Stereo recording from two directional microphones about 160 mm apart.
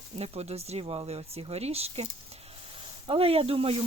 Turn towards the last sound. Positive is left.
turn(degrees=-35)  # may be behind; listen again after turning